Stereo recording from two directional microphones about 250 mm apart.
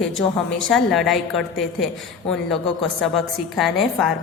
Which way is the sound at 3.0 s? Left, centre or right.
Centre.